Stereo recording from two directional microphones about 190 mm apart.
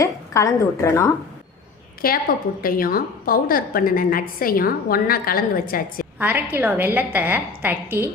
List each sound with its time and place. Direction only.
0.0 s a woman's voice: 15° left (ahead or behind)
2.0 s a woman's voice: 50° left (ahead or behind)
6.1 s a woman's voice: 10° right (ahead or behind)